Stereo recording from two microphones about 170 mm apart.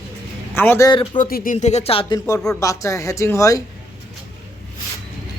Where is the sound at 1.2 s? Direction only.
55° left (ahead or behind).